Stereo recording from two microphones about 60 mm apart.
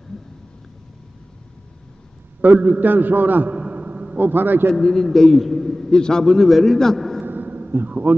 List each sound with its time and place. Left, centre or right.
2.4 s a man's voice: right
4.2 s a man's voice: right
4.7 s a man's voice: centre
7.2 s a sound: right